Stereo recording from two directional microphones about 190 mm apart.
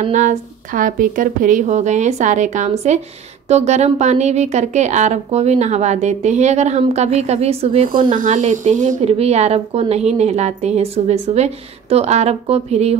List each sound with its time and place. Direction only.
0.0 s speech: 40° right (ahead or behind)
8.1 s speech: 40° right (ahead or behind)